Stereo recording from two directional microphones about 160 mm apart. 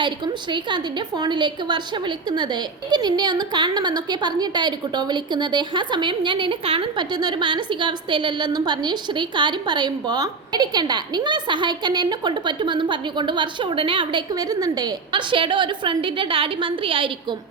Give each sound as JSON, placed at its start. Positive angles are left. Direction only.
{"t": 0.5, "sound": "a woman's voice", "side_deg": -30}